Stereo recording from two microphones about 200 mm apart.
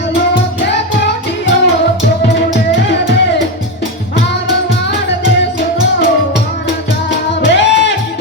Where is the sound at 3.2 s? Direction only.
60° left (ahead or behind).